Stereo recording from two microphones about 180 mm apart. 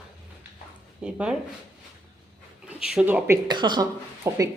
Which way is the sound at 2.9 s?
10° right (ahead or behind).